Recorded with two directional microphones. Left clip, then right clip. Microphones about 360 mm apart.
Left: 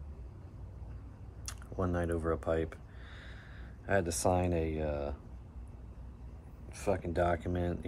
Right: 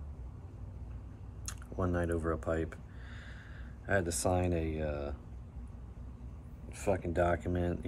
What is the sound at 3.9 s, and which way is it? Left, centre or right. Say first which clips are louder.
Speech: left 1 dB; centre.